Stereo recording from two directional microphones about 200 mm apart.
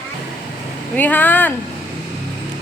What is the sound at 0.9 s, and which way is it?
Speech, 10° left (ahead or behind).